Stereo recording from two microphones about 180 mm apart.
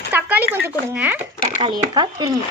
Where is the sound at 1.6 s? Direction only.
25° right (ahead or behind).